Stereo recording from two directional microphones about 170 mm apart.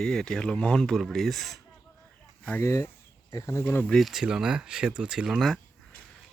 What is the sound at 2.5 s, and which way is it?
Speech, 15° left (ahead or behind).